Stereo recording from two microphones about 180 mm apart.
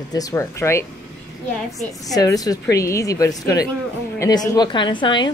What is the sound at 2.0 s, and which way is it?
A woman's voice, 20° left (ahead or behind).